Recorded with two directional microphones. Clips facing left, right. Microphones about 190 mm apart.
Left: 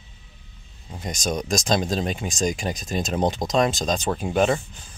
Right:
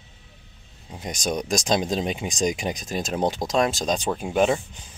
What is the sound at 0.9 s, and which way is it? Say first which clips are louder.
Speech: even; 10° right (ahead or behind).